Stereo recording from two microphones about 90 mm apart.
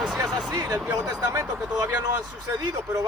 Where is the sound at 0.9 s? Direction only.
40° right (ahead or behind).